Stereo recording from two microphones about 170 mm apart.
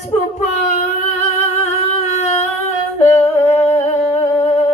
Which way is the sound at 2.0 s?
40° left (ahead or behind).